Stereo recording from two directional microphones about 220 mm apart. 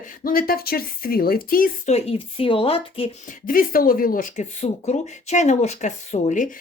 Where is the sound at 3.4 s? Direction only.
40° left (ahead or behind).